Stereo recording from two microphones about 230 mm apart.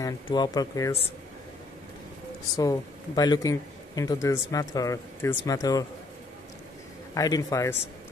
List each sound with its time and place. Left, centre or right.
0.0 s speech: centre
2.5 s speech: centre
7.2 s speech: centre